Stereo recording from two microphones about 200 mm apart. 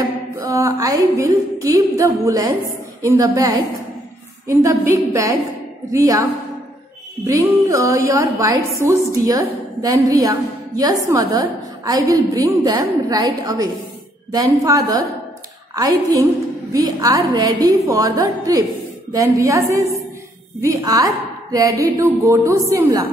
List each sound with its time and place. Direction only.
0.5 s a woman's voice: 15° right (ahead or behind)
7.2 s a woman's voice: 15° right (ahead or behind)